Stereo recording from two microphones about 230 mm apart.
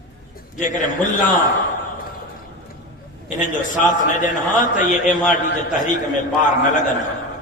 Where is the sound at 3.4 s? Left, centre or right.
Left.